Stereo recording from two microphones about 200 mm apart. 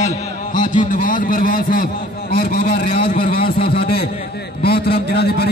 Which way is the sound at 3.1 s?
50° left (ahead or behind).